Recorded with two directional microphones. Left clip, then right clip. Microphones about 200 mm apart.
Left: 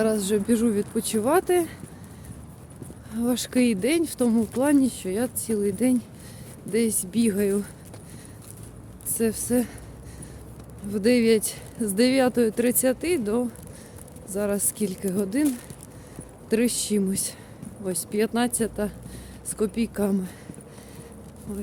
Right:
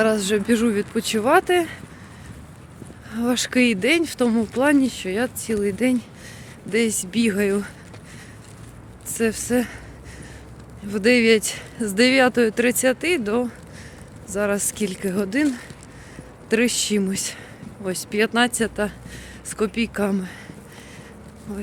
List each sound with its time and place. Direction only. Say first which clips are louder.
0.0 s speech: right 4 dB; 5° left (ahead or behind)
3.1 s speech: right 4 dB; 5° left (ahead or behind)
9.1 s speech: right 3 dB; 10° left (ahead or behind)
10.8 s speech: right 4 dB; 10° left (ahead or behind)